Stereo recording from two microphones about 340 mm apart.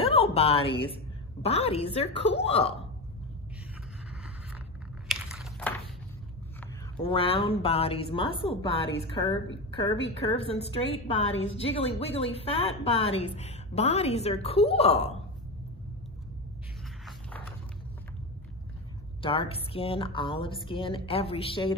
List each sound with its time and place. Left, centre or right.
0.0 s a woman's voice: centre
5.0 s a sound: centre
7.0 s a woman's voice: centre
19.2 s a woman's voice: centre